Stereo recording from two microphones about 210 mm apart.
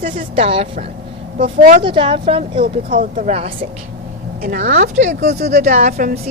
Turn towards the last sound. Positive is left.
turn(degrees=-40)  # may be behind; listen again after turning